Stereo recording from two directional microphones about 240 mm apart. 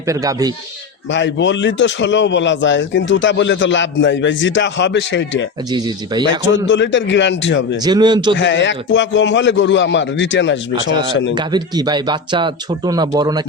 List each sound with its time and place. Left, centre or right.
0.1 s speech: centre
1.1 s speech: left
5.7 s speech: centre
6.7 s speech: left
7.9 s a man's voice: centre
8.4 s speech: left
11.3 s speech: centre